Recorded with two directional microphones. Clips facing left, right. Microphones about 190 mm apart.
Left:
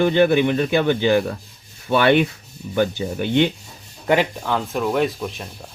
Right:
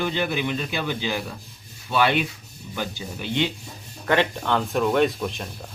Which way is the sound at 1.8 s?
60° left (ahead or behind).